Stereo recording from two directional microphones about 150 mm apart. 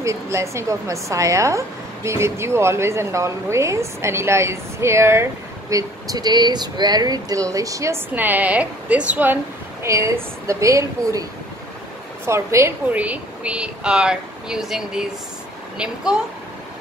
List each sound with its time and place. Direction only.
0.0 s speech: 20° right (ahead or behind)
12.3 s speech: 20° right (ahead or behind)